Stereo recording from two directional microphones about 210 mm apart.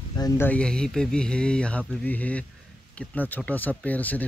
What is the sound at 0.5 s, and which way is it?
Speech, 5° left (ahead or behind).